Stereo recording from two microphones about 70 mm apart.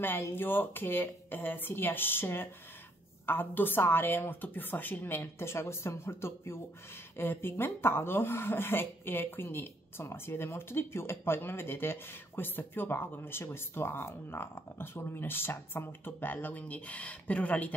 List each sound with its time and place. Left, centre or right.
0.0 s a woman's voice: left